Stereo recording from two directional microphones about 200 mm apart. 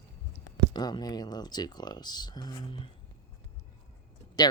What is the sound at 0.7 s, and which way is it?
Speech, 20° left (ahead or behind).